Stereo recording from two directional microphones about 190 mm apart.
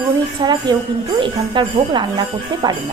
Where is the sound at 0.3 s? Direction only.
25° right (ahead or behind).